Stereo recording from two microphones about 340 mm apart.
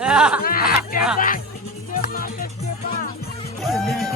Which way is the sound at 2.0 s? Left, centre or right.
Left.